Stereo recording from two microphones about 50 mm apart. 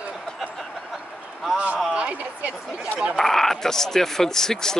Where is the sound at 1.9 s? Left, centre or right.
Right.